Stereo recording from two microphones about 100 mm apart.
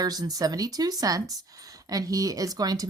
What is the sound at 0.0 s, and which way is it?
Speech, 40° right (ahead or behind).